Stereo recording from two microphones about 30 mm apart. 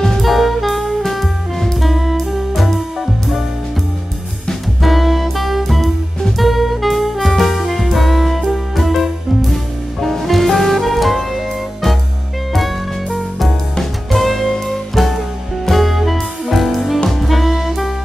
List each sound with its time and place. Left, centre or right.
0.2 s music: centre
4.8 s music: centre
12.5 s music: centre
14.4 s music: centre
15.0 s music: centre
17.2 s saxophone: centre